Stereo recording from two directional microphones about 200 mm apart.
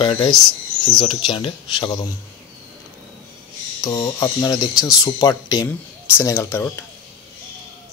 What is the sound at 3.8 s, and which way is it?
Speech, 15° left (ahead or behind).